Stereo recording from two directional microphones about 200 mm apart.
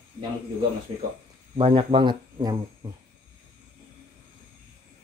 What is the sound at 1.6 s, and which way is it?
Speech, 25° right (ahead or behind).